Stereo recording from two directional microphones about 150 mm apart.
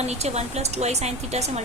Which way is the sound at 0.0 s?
45° right (ahead or behind).